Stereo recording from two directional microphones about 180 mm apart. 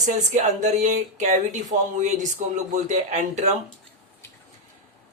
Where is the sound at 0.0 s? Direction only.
40° right (ahead or behind).